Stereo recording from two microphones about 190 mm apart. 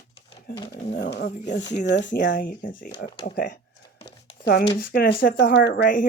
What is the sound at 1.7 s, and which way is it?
Speech, 65° left (ahead or behind).